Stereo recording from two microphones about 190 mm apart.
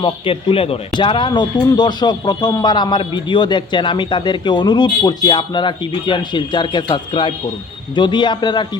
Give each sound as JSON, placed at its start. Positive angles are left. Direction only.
{"t": 0.0, "sound": "speech", "side_deg": 30}